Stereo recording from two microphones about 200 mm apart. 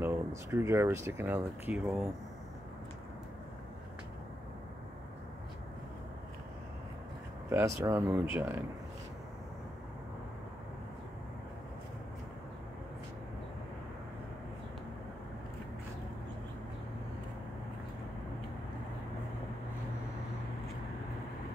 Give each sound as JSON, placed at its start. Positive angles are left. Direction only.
{"t": 0.0, "sound": "speech", "side_deg": -10}
{"t": 7.4, "sound": "speech", "side_deg": -15}